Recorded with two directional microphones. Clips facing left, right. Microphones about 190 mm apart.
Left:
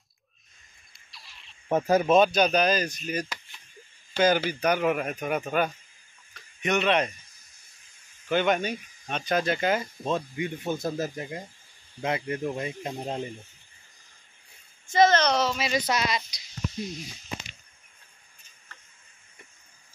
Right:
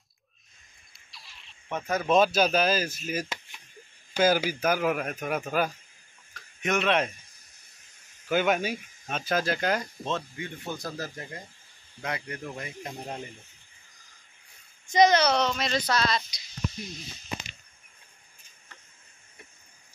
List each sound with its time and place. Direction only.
0.9 s a sound: centre (ahead or behind)
1.7 s speech: 40° left (ahead or behind)
2.0 s speech: centre (ahead or behind)
6.3 s a sound: centre (ahead or behind)
8.3 s speech: 5° right (ahead or behind); by 13.3 s 25° left (ahead or behind)
14.9 s speech: 15° right (ahead or behind)
15.3 s speech: 5° left (ahead or behind)
15.8 s speech: 20° left (ahead or behind)